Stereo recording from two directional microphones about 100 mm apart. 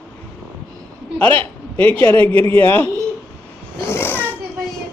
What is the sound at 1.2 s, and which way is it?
Speech, 15° left (ahead or behind).